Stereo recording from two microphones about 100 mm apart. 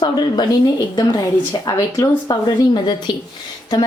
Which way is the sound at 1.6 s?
40° left (ahead or behind).